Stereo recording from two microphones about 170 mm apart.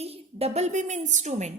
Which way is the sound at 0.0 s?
35° right (ahead or behind).